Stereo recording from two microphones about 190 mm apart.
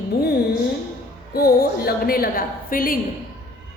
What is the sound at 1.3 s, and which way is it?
Speech, 55° left (ahead or behind).